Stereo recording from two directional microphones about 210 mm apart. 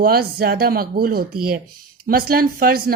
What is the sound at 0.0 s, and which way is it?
A woman's voice, 50° right (ahead or behind).